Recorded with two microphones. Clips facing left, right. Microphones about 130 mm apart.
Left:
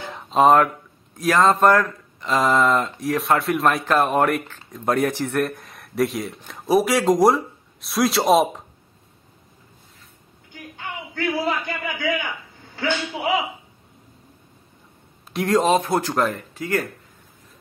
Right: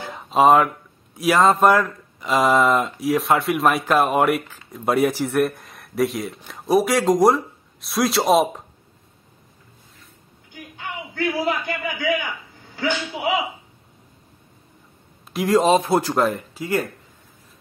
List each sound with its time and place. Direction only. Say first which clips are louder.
0.1 s a sound: even; 5° right (ahead or behind)
1.1 s speech: right 1 dB; 10° right (ahead or behind)
11.3 s speech: right 1 dB; 15° right (ahead or behind)
15.3 s speech: right 2 dB; centre (ahead or behind)
15.7 s speech: right 2 dB; 15° right (ahead or behind)